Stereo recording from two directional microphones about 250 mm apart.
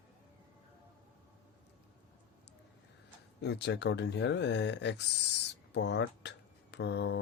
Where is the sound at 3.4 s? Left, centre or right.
Left.